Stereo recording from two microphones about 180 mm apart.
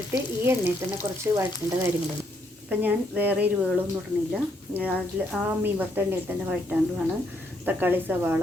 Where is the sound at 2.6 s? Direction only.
10° right (ahead or behind).